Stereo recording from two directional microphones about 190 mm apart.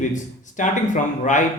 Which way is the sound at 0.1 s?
40° left (ahead or behind).